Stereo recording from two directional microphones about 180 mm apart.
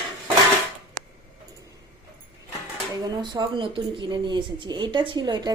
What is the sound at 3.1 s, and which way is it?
A woman's voice, 25° right (ahead or behind).